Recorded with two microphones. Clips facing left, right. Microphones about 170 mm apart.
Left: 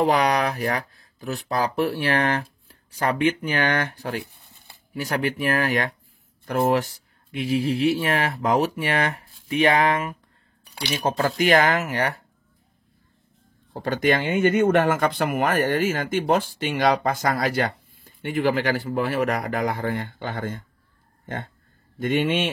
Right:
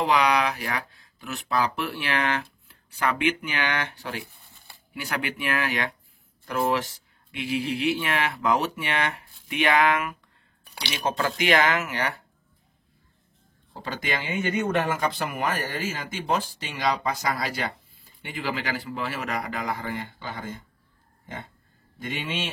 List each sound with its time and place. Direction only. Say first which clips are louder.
0.0 s speech: left 2 dB; 45° left (ahead or behind)
13.7 s speech: left 9 dB; 50° left (ahead or behind)
22.0 s speech: left 10 dB; 50° left (ahead or behind)